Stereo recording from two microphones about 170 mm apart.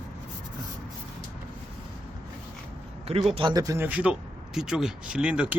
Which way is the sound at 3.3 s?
30° right (ahead or behind).